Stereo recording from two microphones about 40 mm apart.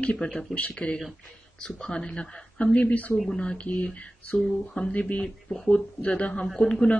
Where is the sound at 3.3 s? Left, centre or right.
Left.